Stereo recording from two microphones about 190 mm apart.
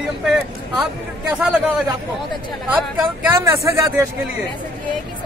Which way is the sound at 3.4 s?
15° right (ahead or behind).